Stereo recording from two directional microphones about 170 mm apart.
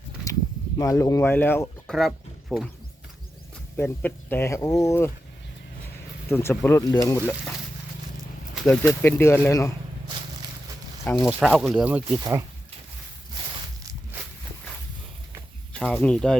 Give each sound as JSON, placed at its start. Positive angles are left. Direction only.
{"t": 0.8, "sound": "speech", "side_deg": 20}
{"t": 2.0, "sound": "speech", "side_deg": 0}
{"t": 3.8, "sound": "speech", "side_deg": 10}
{"t": 6.2, "sound": "speech", "side_deg": 15}
{"t": 8.8, "sound": "speech", "side_deg": 15}
{"t": 11.0, "sound": "speech", "side_deg": 15}
{"t": 11.3, "sound": "speech", "side_deg": 0}
{"t": 12.2, "sound": "speech", "side_deg": -15}
{"t": 15.7, "sound": "speech", "side_deg": 5}